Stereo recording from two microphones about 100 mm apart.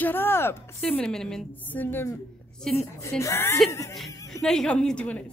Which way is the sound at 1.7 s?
20° left (ahead or behind).